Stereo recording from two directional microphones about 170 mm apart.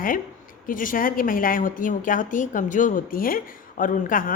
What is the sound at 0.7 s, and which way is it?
A woman's voice, 55° left (ahead or behind).